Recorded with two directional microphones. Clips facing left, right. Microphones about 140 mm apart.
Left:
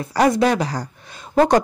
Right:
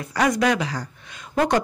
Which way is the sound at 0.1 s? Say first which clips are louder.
Left 4 dB; 30° left (ahead or behind).